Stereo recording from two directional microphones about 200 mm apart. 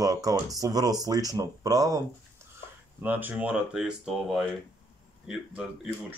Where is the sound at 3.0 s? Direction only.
10° right (ahead or behind).